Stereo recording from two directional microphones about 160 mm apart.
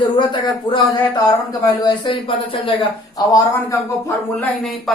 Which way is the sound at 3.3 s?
15° left (ahead or behind).